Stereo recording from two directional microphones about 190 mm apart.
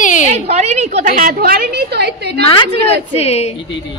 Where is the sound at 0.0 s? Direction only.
40° left (ahead or behind).